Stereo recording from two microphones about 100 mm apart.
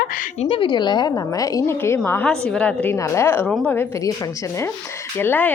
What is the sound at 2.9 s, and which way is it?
Speech, 25° left (ahead or behind).